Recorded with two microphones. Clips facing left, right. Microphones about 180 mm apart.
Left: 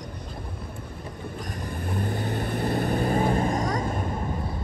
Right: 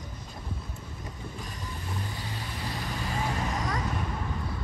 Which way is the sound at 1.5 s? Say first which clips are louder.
Left 10 dB; 55° left (ahead or behind).